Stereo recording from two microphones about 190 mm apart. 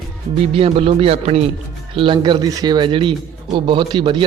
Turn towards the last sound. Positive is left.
turn(degrees=-25)  # may be behind; listen again after turning